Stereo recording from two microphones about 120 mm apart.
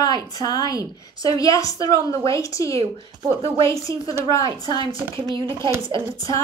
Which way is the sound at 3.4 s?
50° right (ahead or behind).